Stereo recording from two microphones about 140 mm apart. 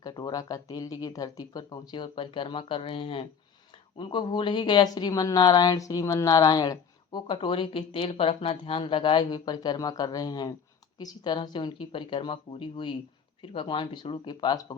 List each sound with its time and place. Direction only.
0.0 s speech: 30° left (ahead or behind)